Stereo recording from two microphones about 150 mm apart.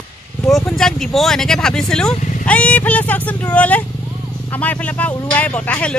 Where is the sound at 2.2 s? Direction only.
60° left (ahead or behind).